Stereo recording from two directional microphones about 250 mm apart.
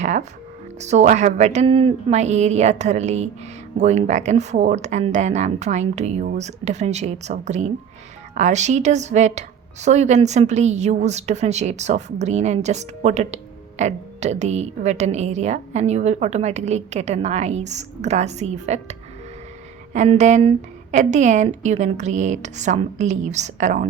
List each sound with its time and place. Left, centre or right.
0.0 s music: right
0.8 s a woman's voice: right